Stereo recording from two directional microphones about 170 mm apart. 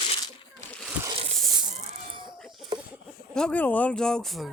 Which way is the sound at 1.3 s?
Centre (ahead or behind).